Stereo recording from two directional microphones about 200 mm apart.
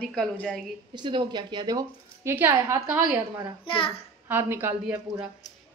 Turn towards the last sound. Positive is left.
turn(degrees=-10)  # may be behind; listen again after turning